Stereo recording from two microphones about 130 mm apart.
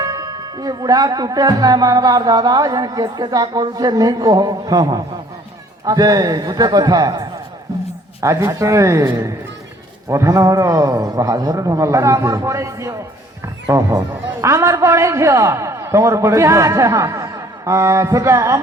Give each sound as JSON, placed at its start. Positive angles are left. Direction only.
{"t": 0.0, "sound": "speech", "side_deg": -25}
{"t": 14.4, "sound": "speech", "side_deg": -20}